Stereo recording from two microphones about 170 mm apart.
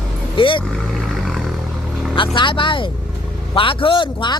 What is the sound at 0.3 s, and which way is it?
Speech, 30° left (ahead or behind).